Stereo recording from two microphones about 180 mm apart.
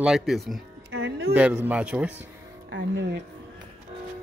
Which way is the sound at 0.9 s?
90° right.